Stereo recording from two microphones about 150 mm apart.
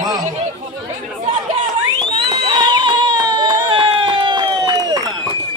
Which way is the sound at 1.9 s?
30° right (ahead or behind).